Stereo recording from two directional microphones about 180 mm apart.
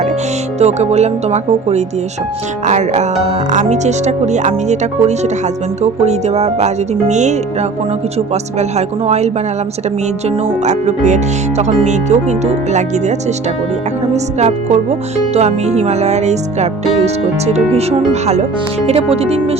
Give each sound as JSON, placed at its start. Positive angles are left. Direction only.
{"t": 0.6, "sound": "speech", "side_deg": -35}
{"t": 10.6, "sound": "speech", "side_deg": -40}
{"t": 14.3, "sound": "speech", "side_deg": -40}